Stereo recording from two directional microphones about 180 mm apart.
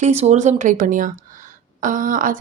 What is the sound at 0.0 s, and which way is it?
A woman's voice, 40° right (ahead or behind).